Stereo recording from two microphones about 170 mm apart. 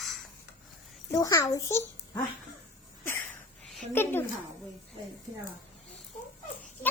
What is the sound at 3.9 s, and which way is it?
Speech, 15° left (ahead or behind).